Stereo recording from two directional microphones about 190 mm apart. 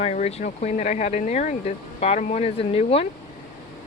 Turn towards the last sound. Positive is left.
turn(degrees=30)  # may be behind; listen again after turning